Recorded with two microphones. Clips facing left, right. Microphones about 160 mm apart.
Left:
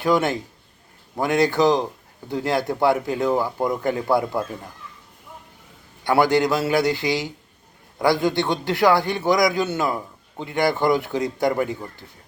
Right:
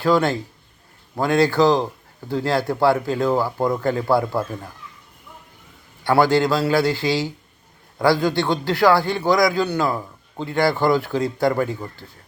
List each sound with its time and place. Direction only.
0.0 s a man's voice: 20° left (ahead or behind)
6.1 s a man's voice: 20° left (ahead or behind)